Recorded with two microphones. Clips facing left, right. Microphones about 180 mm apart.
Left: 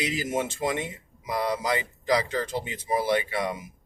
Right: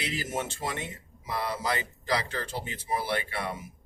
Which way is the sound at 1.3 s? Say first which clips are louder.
Left 4 dB; 20° left (ahead or behind).